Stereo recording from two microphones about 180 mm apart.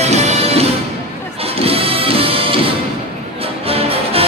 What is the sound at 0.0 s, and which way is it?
Music, 35° right (ahead or behind).